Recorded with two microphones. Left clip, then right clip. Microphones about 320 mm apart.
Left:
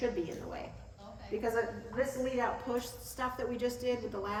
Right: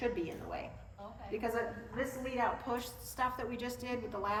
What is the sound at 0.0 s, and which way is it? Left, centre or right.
A woman's voice, centre.